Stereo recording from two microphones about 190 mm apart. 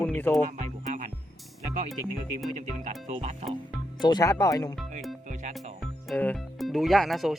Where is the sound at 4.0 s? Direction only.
20° left (ahead or behind).